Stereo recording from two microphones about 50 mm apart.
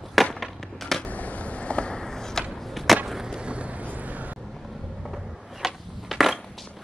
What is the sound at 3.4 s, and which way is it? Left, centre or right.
Vehicle, right.